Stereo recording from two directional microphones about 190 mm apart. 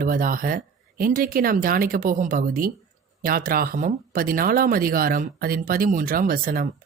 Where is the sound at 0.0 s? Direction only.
45° right (ahead or behind).